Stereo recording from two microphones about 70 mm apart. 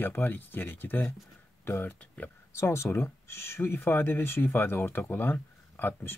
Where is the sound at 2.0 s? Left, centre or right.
Centre.